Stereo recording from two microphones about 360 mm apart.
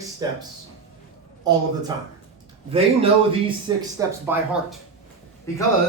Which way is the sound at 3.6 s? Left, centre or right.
Centre.